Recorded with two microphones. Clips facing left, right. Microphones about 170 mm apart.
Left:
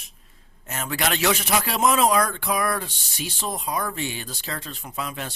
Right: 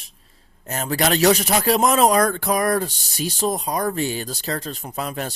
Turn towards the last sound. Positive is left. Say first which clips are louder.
# right 4 dB
turn(degrees=-40)  # may be behind; listen again after turning